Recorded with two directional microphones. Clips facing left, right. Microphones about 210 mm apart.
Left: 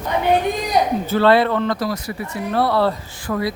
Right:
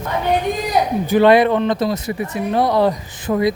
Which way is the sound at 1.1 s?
15° right (ahead or behind).